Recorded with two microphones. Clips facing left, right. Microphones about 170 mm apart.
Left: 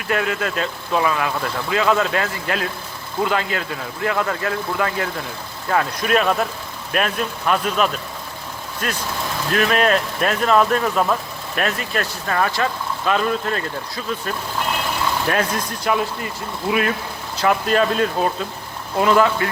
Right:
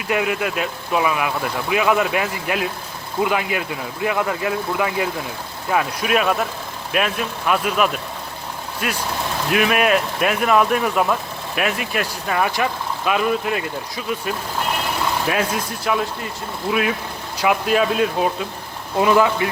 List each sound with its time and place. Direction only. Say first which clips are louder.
0.1 s speech: right 1 dB; 15° right (ahead or behind)
18.9 s speech: even; 15° right (ahead or behind)